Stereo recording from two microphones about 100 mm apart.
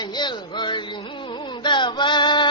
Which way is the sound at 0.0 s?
45° left (ahead or behind).